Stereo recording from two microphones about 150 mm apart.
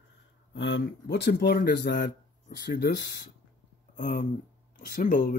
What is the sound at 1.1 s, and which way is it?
Speech, 90° left.